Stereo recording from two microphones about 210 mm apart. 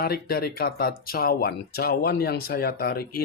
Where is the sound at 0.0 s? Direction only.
45° left (ahead or behind).